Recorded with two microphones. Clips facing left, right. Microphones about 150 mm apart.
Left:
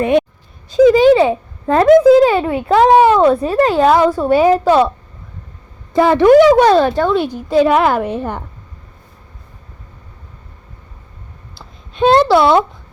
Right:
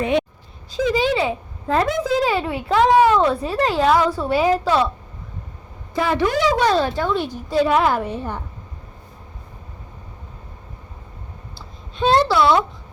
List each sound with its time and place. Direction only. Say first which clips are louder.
0.0 s speech: left 6 dB; 55° left (ahead or behind)
6.1 s a woman's voice: left 12 dB; 60° left (ahead or behind)
11.9 s a woman's voice: left 6 dB; 60° left (ahead or behind)